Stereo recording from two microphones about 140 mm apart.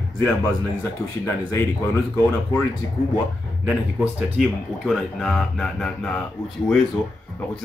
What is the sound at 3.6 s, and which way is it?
Speech, 5° right (ahead or behind).